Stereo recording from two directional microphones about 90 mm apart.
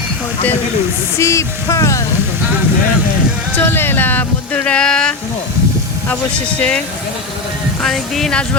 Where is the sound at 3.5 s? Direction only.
25° left (ahead or behind); by 5.1 s 10° left (ahead or behind).